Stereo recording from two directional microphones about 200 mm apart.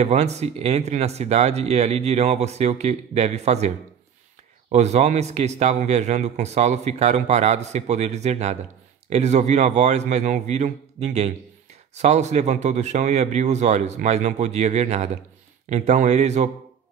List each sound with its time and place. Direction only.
0.0 s a man's voice: 35° right (ahead or behind)